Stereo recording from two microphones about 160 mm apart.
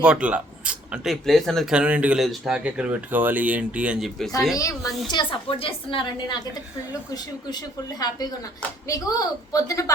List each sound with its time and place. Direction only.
0.0 s speech: 5° right (ahead or behind)
4.5 s speech: 20° left (ahead or behind)
5.1 s a woman's voice: 35° left (ahead or behind)